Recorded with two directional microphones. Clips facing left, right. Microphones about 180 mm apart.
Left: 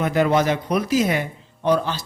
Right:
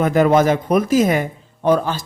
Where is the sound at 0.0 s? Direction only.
45° right (ahead or behind).